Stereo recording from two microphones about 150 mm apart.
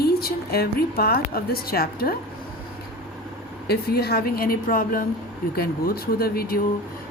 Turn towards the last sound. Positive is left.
turn(degrees=90)